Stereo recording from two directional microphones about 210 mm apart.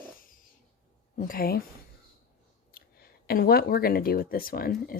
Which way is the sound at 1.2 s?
45° left (ahead or behind).